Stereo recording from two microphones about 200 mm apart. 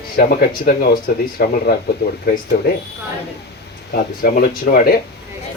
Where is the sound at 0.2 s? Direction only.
50° left (ahead or behind).